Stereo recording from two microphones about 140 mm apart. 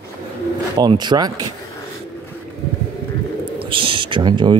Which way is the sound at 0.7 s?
30° right (ahead or behind).